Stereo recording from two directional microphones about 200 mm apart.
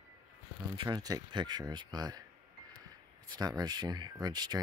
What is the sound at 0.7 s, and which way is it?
Speech, 20° right (ahead or behind).